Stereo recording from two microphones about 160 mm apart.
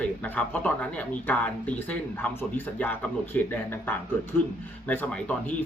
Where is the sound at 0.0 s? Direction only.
10° left (ahead or behind).